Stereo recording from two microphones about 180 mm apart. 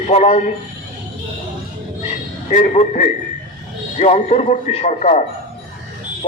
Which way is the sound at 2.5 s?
45° left (ahead or behind).